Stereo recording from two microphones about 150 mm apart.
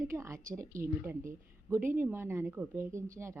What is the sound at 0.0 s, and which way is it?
A woman's voice, 20° right (ahead or behind).